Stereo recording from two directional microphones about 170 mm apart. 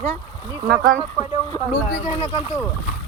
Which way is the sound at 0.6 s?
65° right (ahead or behind).